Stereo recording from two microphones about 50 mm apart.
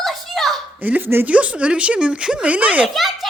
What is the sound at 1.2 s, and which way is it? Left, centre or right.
Speech, right.